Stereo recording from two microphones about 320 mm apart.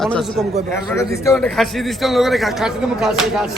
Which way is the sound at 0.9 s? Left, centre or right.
Centre.